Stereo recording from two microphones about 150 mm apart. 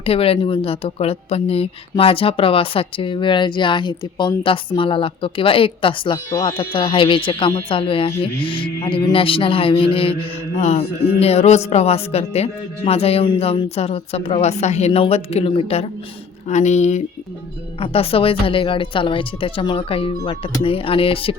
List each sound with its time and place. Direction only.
0.0 s speech: 40° left (ahead or behind)
10.6 s a woman's voice: 50° left (ahead or behind)